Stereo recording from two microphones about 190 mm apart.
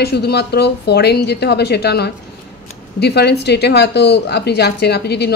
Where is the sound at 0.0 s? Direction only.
60° left (ahead or behind).